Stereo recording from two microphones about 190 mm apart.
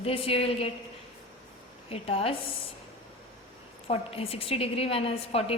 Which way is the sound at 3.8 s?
30° left (ahead or behind).